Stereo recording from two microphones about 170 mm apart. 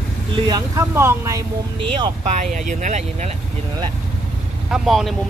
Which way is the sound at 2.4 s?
45° right (ahead or behind).